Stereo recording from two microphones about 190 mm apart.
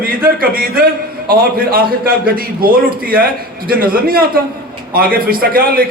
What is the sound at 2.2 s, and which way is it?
A man's voice, 50° right (ahead or behind).